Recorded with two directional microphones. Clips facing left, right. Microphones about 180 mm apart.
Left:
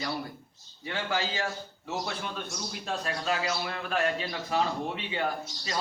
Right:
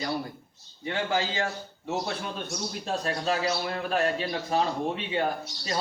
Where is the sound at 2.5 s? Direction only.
35° right (ahead or behind).